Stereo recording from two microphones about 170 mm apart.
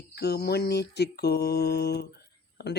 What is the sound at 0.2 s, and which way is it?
Speech, 70° left (ahead or behind).